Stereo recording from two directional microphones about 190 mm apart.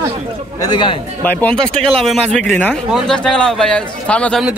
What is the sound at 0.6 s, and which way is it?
Speech, 25° left (ahead or behind).